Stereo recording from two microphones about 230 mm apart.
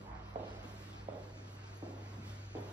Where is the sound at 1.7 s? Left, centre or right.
Centre.